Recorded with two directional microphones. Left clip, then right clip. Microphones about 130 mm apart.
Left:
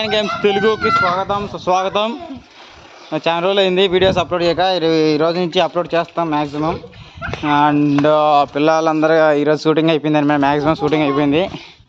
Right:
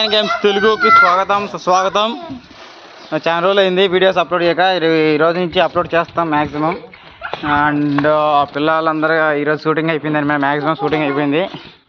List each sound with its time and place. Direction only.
0.0 s a man's voice: 10° left (ahead or behind); by 5.7 s 35° left (ahead or behind)
5.7 s a man's voice: 20° left (ahead or behind)
7.4 s speech: 80° left
8.0 s a man's voice: 65° left (ahead or behind)
11.1 s speech: 45° left (ahead or behind)